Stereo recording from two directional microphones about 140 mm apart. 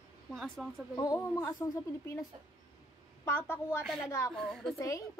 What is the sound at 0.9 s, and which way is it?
A woman's voice, 25° left (ahead or behind).